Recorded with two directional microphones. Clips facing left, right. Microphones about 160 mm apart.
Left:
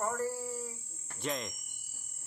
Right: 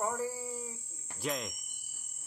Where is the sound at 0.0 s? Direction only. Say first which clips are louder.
Left 1 dB; 10° right (ahead or behind).